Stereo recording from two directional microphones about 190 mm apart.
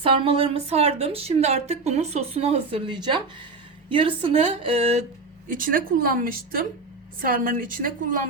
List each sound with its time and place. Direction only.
0.0 s a woman's voice: 30° right (ahead or behind)
5.5 s a woman's voice: 45° right (ahead or behind)